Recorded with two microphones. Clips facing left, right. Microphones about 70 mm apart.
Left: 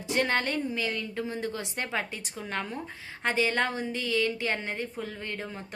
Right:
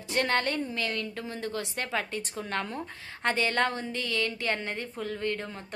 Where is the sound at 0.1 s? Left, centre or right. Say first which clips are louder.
Even; centre.